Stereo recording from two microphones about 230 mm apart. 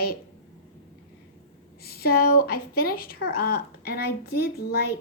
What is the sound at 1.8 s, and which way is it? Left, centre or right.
A woman's voice, left.